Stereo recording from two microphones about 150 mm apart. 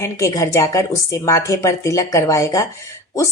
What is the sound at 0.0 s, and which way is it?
A woman's voice, 20° left (ahead or behind).